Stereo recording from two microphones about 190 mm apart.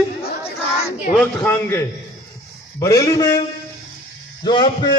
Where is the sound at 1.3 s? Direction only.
10° left (ahead or behind).